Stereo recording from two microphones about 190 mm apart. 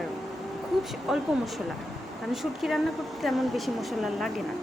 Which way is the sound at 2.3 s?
Centre (ahead or behind).